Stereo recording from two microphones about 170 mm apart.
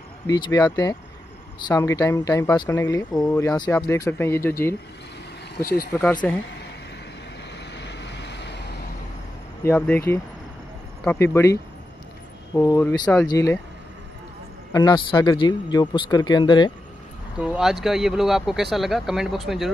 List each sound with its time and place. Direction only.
0.3 s speech: 20° left (ahead or behind)
5.9 s speech: 10° left (ahead or behind)
7.5 s waves: 90° left
9.6 s speech: 10° left (ahead or behind)
14.7 s speech: 25° left (ahead or behind)
17.4 s speech: 5° right (ahead or behind)